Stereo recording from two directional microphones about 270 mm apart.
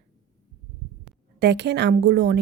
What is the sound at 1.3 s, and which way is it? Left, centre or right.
A woman's voice, right.